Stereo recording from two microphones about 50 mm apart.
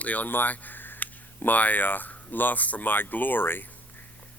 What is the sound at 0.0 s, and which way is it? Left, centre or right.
A man's voice, left.